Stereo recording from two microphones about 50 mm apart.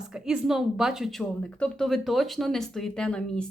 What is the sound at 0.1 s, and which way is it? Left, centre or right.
A woman's voice, centre.